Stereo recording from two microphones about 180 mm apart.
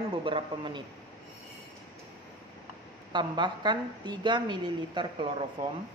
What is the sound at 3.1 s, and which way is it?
A woman's voice, 25° right (ahead or behind).